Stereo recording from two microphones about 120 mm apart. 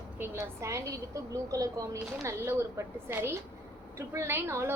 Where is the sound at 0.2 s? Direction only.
25° right (ahead or behind).